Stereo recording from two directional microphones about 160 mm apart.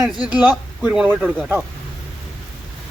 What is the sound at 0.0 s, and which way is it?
Speech, centre (ahead or behind).